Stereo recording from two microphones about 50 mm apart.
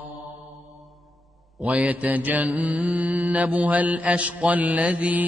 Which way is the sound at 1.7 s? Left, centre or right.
Right.